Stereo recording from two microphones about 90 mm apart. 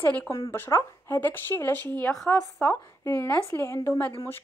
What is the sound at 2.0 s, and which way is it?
Speech, 10° left (ahead or behind).